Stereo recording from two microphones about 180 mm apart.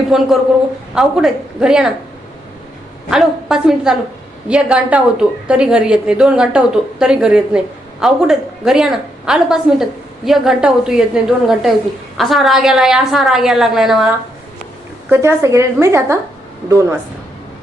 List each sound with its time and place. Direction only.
0.1 s a woman's voice: centre (ahead or behind)
3.1 s a woman's voice: centre (ahead or behind)
15.1 s a woman's voice: 15° right (ahead or behind)